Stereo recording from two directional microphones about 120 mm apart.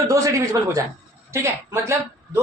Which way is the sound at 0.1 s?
25° right (ahead or behind).